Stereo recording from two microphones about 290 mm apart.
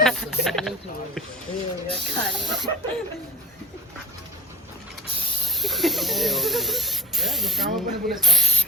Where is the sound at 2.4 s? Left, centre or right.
Centre.